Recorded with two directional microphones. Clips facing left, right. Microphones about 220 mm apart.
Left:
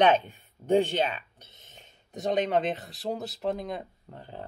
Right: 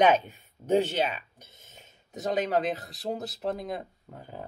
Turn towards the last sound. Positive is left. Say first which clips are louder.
# even
turn(degrees=-5)  # may be behind; listen again after turning